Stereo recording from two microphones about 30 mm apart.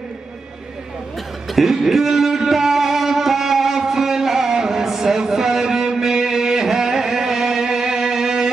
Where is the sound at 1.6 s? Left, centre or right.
Centre.